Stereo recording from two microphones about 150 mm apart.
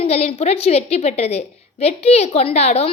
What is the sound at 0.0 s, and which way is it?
A woman's voice, 40° left (ahead or behind).